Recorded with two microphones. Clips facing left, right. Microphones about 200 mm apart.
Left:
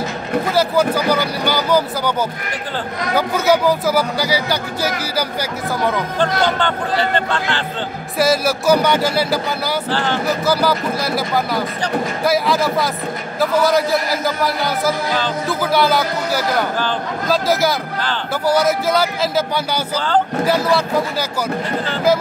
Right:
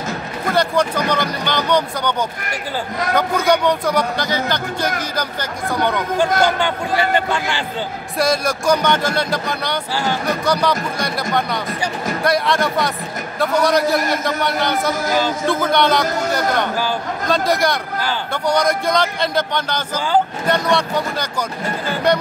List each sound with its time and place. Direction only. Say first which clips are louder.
0.5 s speech: even; 5° left (ahead or behind)
3.2 s speech: left 1 dB; 5° left (ahead or behind)
6.4 s speech: even; 10° right (ahead or behind)
8.2 s speech: left 2 dB; 5° left (ahead or behind)